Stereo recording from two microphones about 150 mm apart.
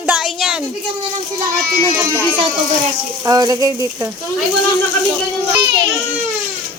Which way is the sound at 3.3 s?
25° right (ahead or behind).